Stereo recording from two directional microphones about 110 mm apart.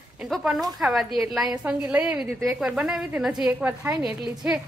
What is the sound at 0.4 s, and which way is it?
A woman's voice, centre (ahead or behind).